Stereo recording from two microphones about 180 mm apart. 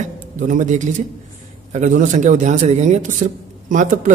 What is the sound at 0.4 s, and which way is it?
A man's voice, 45° right (ahead or behind).